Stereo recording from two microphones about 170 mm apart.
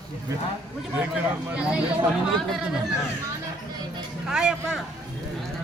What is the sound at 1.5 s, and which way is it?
Speech, 5° right (ahead or behind).